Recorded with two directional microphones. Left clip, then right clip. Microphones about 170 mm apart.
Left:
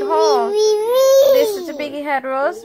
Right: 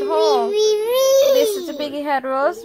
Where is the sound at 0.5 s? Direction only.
20° right (ahead or behind).